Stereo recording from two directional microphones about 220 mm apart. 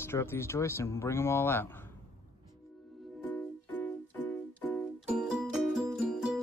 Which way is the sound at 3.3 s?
10° left (ahead or behind).